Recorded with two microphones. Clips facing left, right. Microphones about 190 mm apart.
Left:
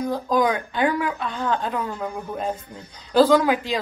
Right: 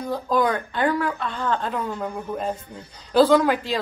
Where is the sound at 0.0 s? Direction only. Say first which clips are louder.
Left 1 dB; centre (ahead or behind).